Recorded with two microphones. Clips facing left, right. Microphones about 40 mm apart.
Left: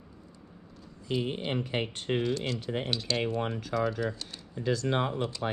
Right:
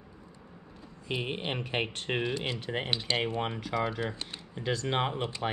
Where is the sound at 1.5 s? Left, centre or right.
Right.